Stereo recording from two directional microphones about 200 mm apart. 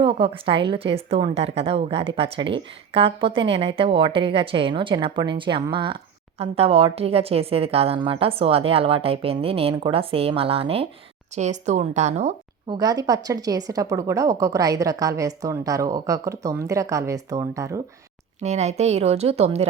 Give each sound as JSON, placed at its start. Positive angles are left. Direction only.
{"t": 0.0, "sound": "a woman's voice", "side_deg": -25}
{"t": 12.7, "sound": "a woman's voice", "side_deg": -20}
{"t": 18.4, "sound": "a woman's voice", "side_deg": -35}